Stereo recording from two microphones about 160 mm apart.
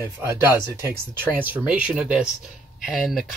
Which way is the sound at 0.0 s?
15° right (ahead or behind).